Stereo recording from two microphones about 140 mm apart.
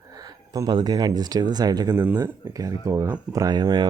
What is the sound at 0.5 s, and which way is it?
Speech, 30° right (ahead or behind).